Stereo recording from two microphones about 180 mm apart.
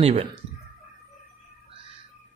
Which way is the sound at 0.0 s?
35° right (ahead or behind).